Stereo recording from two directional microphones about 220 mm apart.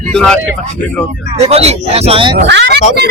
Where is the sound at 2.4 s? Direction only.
50° right (ahead or behind).